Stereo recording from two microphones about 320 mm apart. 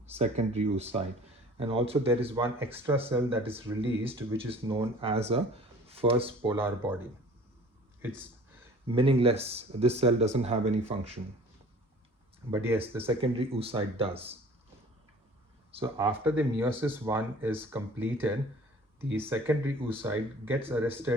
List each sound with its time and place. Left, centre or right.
0.1 s speech: centre
8.9 s speech: centre
12.5 s speech: centre
15.7 s speech: centre